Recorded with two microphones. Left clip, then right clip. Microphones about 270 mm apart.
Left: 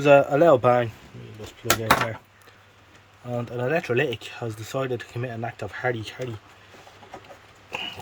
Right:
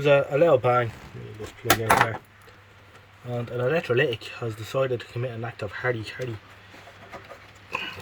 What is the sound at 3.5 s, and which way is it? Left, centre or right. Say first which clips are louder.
Speech: right 1 dB; centre.